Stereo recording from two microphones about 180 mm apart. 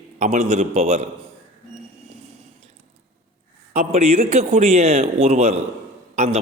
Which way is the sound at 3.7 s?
35° right (ahead or behind).